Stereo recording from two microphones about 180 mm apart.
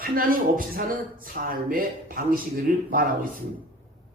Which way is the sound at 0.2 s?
50° right (ahead or behind).